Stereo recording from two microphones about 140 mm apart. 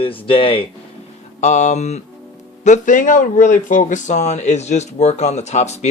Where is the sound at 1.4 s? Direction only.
55° left (ahead or behind).